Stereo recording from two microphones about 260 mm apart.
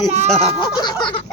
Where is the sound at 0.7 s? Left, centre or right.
Centre.